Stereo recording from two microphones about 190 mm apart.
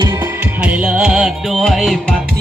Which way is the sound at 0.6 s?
5° right (ahead or behind).